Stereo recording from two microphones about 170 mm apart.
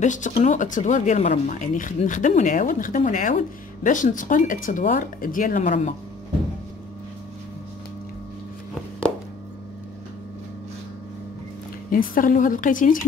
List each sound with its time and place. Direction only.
0.0 s speech: 45° left (ahead or behind)
11.9 s speech: 55° left (ahead or behind)